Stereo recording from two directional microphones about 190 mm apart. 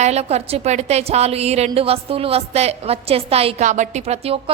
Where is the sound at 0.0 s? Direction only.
35° right (ahead or behind).